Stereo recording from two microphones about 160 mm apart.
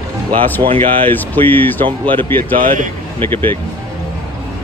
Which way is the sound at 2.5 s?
55° right (ahead or behind).